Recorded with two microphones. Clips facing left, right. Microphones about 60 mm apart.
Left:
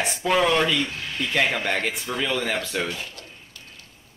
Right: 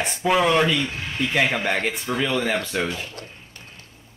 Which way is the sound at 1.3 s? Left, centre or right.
Centre.